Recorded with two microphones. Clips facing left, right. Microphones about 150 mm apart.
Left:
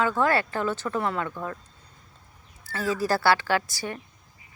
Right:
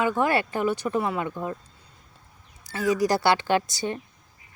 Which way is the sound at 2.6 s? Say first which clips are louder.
Right 3 dB; 15° right (ahead or behind).